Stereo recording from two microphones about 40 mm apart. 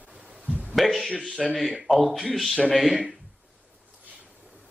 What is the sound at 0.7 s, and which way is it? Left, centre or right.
Speech, centre.